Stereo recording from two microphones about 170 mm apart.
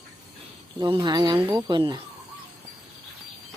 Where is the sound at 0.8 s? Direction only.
25° right (ahead or behind).